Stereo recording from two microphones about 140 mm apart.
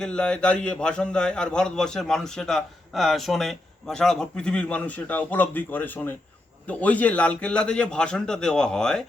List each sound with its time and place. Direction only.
0.0 s a man's voice: 5° left (ahead or behind)